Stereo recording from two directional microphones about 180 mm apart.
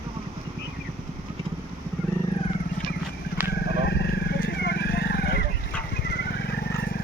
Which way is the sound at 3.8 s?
70° left (ahead or behind).